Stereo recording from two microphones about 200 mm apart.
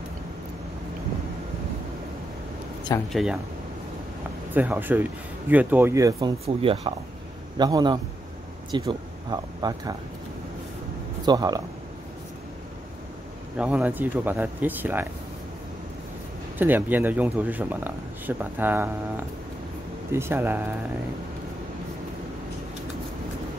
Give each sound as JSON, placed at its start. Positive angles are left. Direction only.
{"t": 3.1, "sound": "speech", "side_deg": 0}
{"t": 4.6, "sound": "speech", "side_deg": -10}
{"t": 6.1, "sound": "speech", "side_deg": -30}
{"t": 11.2, "sound": "speech", "side_deg": -20}
{"t": 13.6, "sound": "speech", "side_deg": -5}
{"t": 16.5, "sound": "speech", "side_deg": -10}